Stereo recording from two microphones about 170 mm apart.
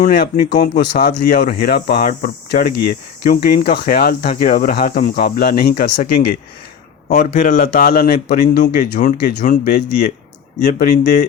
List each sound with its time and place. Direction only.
0.0 s a man's voice: 60° left (ahead or behind)